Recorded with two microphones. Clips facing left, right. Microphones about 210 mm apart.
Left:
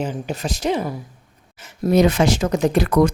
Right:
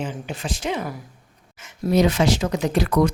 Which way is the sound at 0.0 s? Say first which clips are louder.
Left 4 dB; 40° left (ahead or behind).